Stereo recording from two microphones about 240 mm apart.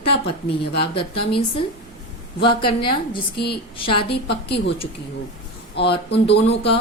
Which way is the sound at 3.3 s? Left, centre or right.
Left.